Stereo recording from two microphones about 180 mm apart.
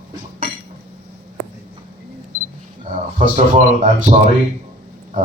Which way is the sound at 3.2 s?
45° right (ahead or behind).